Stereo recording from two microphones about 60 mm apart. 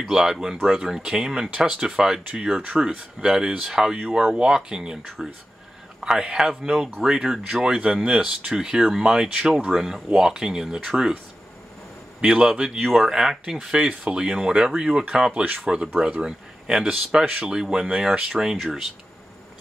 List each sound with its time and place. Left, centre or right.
0.0 s speech: centre
12.2 s speech: centre
12.8 s speech: centre; by 18.4 s right
18.4 s speech: centre